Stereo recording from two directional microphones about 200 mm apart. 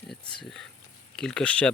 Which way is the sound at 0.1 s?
5° left (ahead or behind).